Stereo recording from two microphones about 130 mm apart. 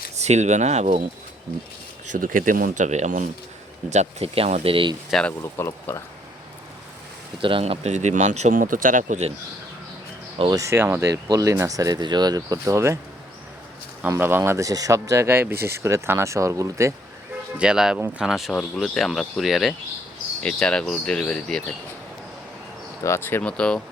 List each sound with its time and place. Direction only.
0.2 s speech: 60° right (ahead or behind)
2.0 s speech: 90° right; by 3.2 s 70° right (ahead or behind)
3.8 s speech: 55° right (ahead or behind)
5.4 s speech: 20° left (ahead or behind)
7.4 s speech: 45° right (ahead or behind); by 9.3 s 65° right (ahead or behind)
10.5 s speech: 25° right (ahead or behind)
14.2 s speech: 15° right (ahead or behind)
17.6 s speech: 5° right (ahead or behind)
23.0 s speech: 20° left (ahead or behind)